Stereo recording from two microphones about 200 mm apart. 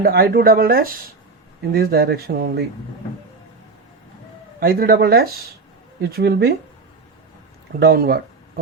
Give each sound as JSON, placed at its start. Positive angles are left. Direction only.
{"t": 0.0, "sound": "speech", "side_deg": -50}
{"t": 4.6, "sound": "speech", "side_deg": -50}
{"t": 7.8, "sound": "speech", "side_deg": -50}